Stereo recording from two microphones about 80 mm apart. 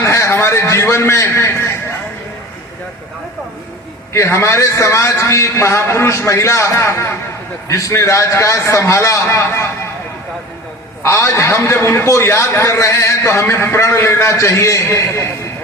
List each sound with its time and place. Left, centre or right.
0.0 s a sound: left
4.1 s a man's voice: left
11.0 s a man's voice: left